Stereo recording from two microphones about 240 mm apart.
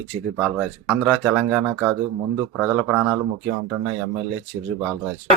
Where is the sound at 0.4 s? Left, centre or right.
Centre.